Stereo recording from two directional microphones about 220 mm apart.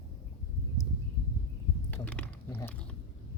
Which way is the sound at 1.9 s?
5° left (ahead or behind).